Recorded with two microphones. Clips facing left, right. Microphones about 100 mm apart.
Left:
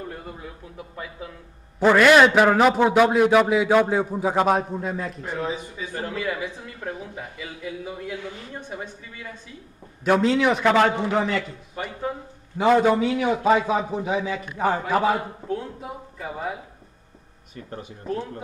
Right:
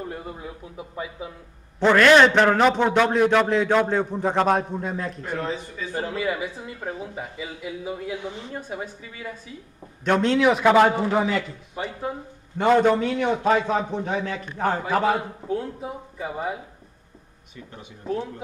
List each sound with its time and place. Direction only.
0.1 s speech: 15° right (ahead or behind)
1.8 s a man's voice: 10° left (ahead or behind)
5.9 s speech: 15° right (ahead or behind)
8.5 s speech: 10° right (ahead or behind)
10.0 s a man's voice: 5° left (ahead or behind)